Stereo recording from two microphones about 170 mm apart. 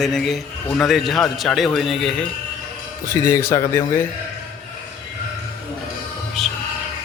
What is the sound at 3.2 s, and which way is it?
Speech, 15° left (ahead or behind).